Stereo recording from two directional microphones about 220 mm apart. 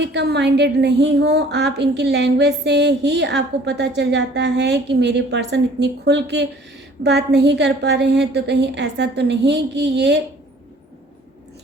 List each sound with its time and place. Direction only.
0.0 s a woman's voice: 50° right (ahead or behind)